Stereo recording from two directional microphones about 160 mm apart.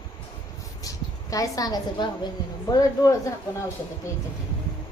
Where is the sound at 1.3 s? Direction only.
20° left (ahead or behind).